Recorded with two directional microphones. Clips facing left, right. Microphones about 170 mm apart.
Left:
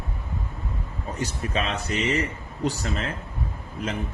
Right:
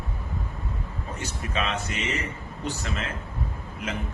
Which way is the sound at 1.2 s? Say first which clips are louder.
Left 2 dB; 35° left (ahead or behind).